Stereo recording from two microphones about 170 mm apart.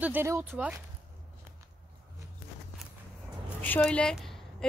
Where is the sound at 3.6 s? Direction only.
5° left (ahead or behind).